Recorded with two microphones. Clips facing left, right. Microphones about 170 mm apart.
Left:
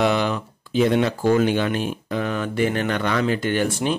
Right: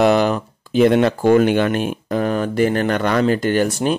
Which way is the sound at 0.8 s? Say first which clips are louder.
Right 5 dB; 60° right (ahead or behind).